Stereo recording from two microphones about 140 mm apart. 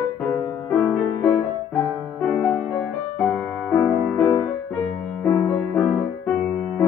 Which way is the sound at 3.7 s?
20° left (ahead or behind).